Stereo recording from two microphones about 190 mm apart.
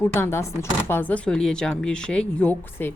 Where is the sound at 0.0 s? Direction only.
15° left (ahead or behind).